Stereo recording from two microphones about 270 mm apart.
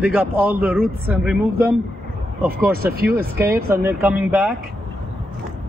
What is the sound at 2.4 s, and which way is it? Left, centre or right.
Speech, right.